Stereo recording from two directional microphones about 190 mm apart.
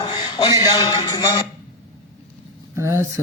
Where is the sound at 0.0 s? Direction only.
25° left (ahead or behind).